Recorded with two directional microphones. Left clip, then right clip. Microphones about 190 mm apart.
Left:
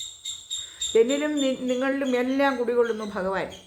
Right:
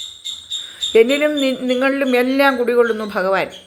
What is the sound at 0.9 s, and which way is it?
A man's voice, 15° right (ahead or behind).